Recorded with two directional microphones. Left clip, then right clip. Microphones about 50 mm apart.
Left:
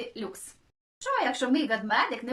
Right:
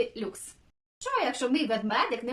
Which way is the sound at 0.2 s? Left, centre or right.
Right.